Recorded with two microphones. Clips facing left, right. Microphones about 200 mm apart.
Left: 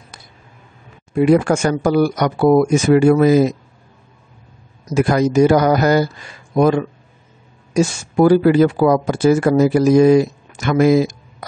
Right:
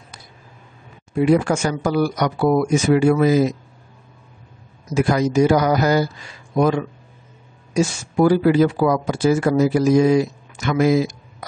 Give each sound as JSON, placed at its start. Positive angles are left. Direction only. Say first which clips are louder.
{"t": 1.2, "sound": "speech", "louder": "left 3 dB", "side_deg": 55}
{"t": 4.9, "sound": "speech", "louder": "left 3 dB", "side_deg": 55}